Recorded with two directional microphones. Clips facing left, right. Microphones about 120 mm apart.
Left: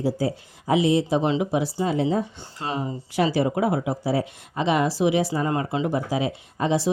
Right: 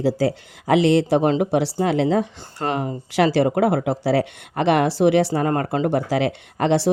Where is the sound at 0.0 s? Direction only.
90° right.